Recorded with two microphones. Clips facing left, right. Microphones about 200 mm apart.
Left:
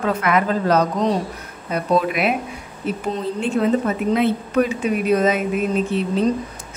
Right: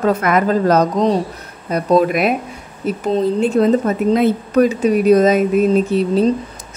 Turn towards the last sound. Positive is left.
turn(degrees=-40)  # may be behind; listen again after turning